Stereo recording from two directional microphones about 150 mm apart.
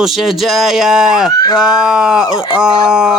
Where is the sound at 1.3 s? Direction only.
25° left (ahead or behind).